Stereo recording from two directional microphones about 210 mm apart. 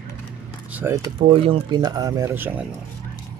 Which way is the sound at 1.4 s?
25° right (ahead or behind).